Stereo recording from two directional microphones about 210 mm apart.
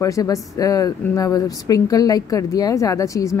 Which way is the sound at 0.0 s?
15° left (ahead or behind).